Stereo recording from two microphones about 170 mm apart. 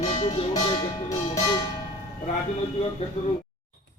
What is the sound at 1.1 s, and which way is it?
Speech, 20° left (ahead or behind).